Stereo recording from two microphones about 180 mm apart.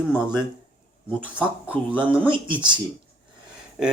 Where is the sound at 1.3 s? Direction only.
5° right (ahead or behind).